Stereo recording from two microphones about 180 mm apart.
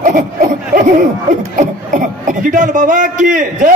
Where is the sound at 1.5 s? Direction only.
45° right (ahead or behind).